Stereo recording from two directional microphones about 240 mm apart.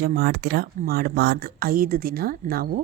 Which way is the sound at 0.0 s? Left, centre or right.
Right.